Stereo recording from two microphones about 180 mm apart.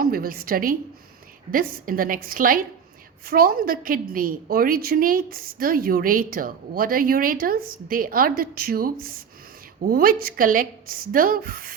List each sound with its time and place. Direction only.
0.0 s a woman's voice: 55° right (ahead or behind)